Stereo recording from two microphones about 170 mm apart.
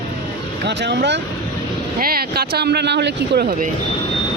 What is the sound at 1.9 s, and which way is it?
Speech, 60° right (ahead or behind).